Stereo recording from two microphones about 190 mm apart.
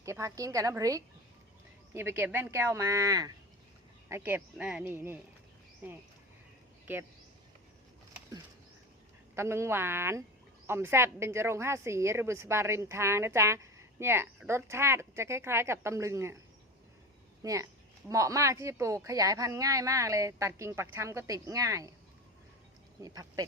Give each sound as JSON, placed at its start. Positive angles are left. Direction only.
{"t": 0.0, "sound": "a woman's voice", "side_deg": -15}
{"t": 9.3, "sound": "a woman's voice", "side_deg": -15}
{"t": 17.4, "sound": "a woman's voice", "side_deg": -20}
{"t": 23.0, "sound": "speech", "side_deg": -20}